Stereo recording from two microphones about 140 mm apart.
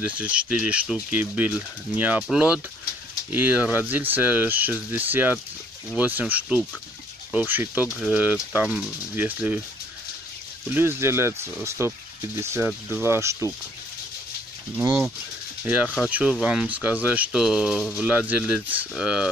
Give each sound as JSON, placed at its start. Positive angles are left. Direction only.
{"t": 0.0, "sound": "speech", "side_deg": -10}
{"t": 10.7, "sound": "speech", "side_deg": -15}
{"t": 14.8, "sound": "speech", "side_deg": -10}